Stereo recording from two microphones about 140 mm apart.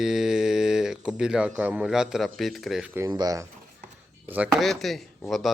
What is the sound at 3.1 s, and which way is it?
Speech, 25° right (ahead or behind).